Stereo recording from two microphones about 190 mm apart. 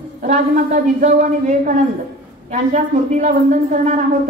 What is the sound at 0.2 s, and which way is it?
A man's voice, 45° right (ahead or behind).